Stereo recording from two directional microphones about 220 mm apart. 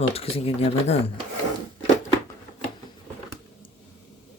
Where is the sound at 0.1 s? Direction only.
25° left (ahead or behind).